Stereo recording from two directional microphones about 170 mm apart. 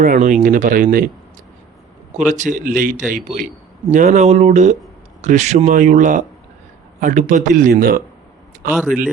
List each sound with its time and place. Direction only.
0.0 s speech: 50° right (ahead or behind)
2.1 s speech: 45° right (ahead or behind)
7.7 s speech: 60° right (ahead or behind)